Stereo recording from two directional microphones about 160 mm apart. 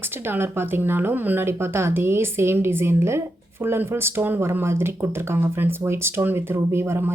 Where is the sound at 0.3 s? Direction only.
15° right (ahead or behind).